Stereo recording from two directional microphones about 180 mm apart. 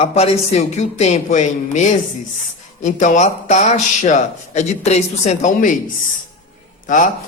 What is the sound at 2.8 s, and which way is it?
Speech, 45° left (ahead or behind).